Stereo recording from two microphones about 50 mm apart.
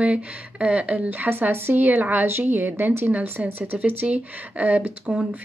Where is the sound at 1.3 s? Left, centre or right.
Right.